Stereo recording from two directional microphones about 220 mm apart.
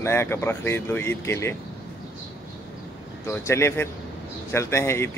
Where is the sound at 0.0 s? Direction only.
10° left (ahead or behind).